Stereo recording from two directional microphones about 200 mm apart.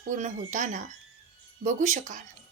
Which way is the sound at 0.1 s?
40° right (ahead or behind).